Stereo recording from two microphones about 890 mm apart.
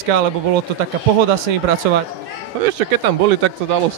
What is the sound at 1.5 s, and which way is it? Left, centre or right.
Speech, right.